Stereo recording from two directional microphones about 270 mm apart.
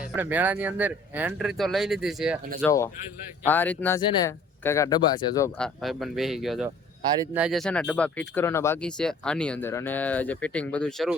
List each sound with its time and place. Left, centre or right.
0.0 s speech: centre
2.6 s speech: centre